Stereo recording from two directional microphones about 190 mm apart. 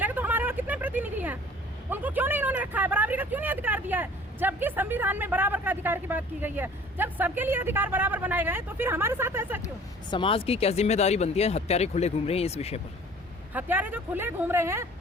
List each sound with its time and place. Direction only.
0.0 s vehicle: 10° right (ahead or behind)
1.9 s speech: 10° right (ahead or behind)
10.1 s speech: 25° left (ahead or behind)
13.5 s speech: 10° right (ahead or behind)